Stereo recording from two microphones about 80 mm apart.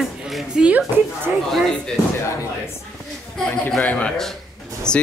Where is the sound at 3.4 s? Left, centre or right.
Centre.